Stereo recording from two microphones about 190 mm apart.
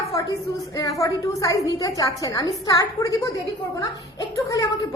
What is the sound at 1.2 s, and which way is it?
A woman's voice, 15° left (ahead or behind).